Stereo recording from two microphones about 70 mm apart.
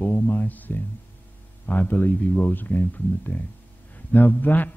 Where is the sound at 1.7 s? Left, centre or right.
Left.